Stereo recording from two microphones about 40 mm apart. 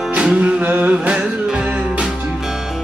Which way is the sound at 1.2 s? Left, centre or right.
Centre.